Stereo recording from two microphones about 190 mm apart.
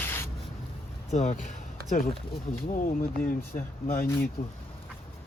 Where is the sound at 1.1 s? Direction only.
40° left (ahead or behind).